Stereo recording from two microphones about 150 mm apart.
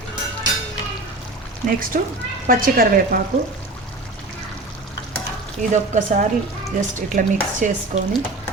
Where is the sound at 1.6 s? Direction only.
65° right (ahead or behind).